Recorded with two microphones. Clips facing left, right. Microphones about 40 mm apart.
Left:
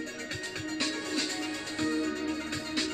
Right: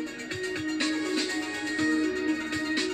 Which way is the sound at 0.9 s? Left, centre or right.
Centre.